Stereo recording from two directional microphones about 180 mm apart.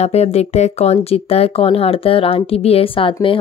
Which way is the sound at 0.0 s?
35° left (ahead or behind).